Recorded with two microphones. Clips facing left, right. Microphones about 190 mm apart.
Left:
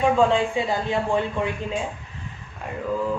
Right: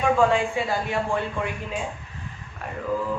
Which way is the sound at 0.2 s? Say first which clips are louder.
Left 1 dB; 20° left (ahead or behind).